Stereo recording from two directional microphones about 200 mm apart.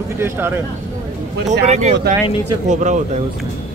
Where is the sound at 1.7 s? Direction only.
35° right (ahead or behind).